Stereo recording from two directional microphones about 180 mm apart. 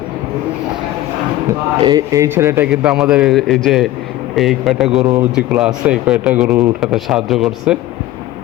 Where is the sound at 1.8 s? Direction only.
20° right (ahead or behind); by 7.7 s 5° right (ahead or behind).